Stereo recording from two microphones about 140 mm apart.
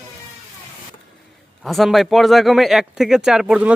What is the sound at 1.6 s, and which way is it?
Speech, centre (ahead or behind).